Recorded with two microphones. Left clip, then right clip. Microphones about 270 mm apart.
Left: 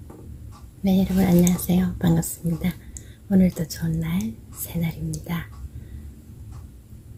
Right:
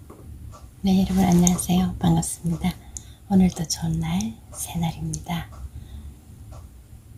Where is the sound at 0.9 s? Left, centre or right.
Centre.